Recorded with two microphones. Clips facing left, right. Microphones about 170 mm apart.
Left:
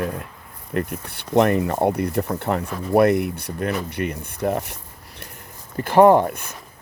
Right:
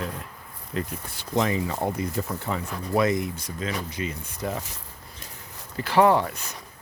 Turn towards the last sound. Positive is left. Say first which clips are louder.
# left 6 dB
turn(degrees=55)  # may be behind; listen again after turning